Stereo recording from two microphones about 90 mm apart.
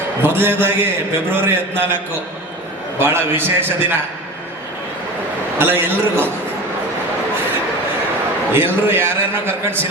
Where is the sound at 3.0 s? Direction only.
25° right (ahead or behind).